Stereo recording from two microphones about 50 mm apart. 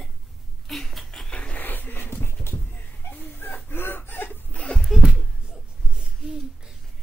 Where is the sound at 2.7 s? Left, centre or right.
Left.